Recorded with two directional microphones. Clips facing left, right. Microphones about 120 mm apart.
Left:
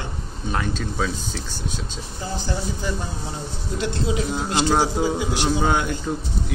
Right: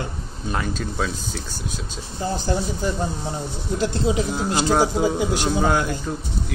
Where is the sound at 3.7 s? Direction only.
35° right (ahead or behind).